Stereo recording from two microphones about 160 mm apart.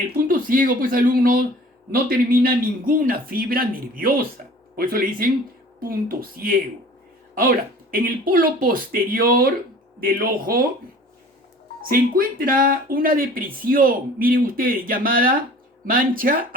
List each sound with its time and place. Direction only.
0.3 s speech: 60° right (ahead or behind)
11.8 s speech: 65° right (ahead or behind)